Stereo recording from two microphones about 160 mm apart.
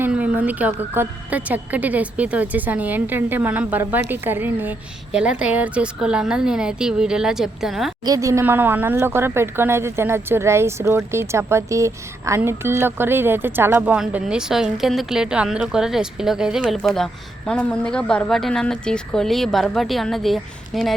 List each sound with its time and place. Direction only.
0.0 s a woman's voice: 10° right (ahead or behind)
8.0 s a woman's voice: 20° right (ahead or behind); by 20.9 s centre (ahead or behind)